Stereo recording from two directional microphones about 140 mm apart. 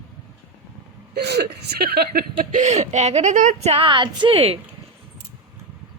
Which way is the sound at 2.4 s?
65° right (ahead or behind).